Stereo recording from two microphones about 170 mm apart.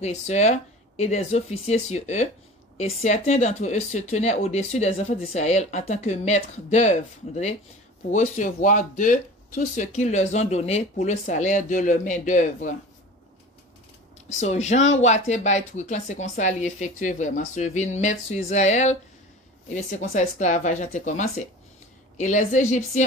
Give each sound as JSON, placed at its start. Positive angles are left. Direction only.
{"t": 0.0, "sound": "speech", "side_deg": 40}
{"t": 14.4, "sound": "speech", "side_deg": 40}